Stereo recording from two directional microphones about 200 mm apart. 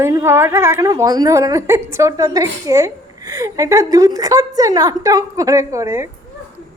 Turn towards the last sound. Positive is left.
turn(degrees=-15)  # may be behind; listen again after turning